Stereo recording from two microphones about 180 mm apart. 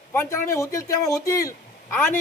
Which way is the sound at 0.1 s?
15° left (ahead or behind).